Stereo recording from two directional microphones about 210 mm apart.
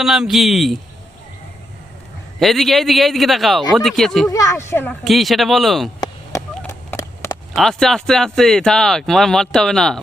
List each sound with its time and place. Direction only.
0.0 s speech: centre (ahead or behind)
2.4 s speech: centre (ahead or behind)
4.3 s speech: 15° left (ahead or behind)
5.0 s speech: centre (ahead or behind)
6.7 s a sound: 15° left (ahead or behind)
7.5 s speech: centre (ahead or behind)